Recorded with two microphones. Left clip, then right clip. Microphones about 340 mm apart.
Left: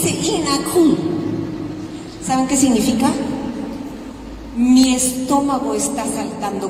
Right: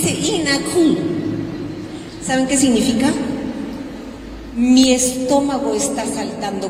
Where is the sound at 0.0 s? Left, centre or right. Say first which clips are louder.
Even; left.